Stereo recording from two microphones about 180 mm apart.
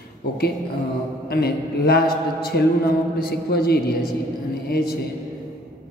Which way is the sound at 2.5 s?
70° left (ahead or behind).